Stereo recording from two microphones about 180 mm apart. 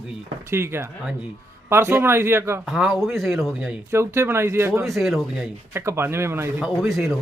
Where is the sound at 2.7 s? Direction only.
5° right (ahead or behind).